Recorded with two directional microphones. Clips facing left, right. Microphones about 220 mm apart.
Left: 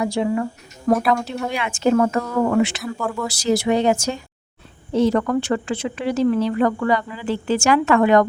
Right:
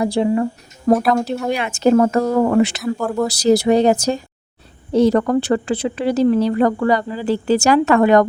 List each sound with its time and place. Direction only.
0.0 s speech: 35° right (ahead or behind)